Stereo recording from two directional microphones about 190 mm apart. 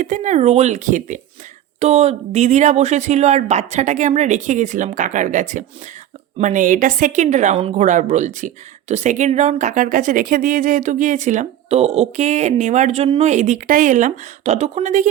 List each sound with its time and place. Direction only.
0.0 s speech: 40° right (ahead or behind)